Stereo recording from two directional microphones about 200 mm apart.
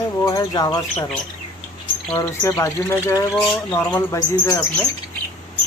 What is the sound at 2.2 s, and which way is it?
Speech, 15° left (ahead or behind).